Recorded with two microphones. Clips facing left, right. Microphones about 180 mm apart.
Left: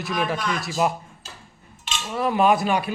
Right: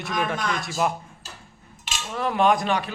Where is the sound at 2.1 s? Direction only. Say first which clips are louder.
Left 2 dB; 5° left (ahead or behind).